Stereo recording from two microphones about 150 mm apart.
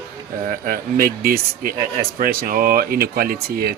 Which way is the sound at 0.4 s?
65° right (ahead or behind).